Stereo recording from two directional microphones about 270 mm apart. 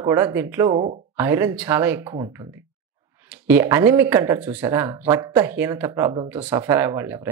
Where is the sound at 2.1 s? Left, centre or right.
Right.